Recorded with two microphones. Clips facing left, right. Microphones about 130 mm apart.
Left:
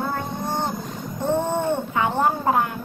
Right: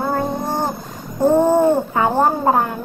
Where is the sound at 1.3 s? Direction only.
40° right (ahead or behind).